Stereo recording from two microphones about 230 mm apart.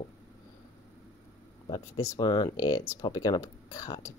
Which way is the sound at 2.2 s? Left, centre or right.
Centre.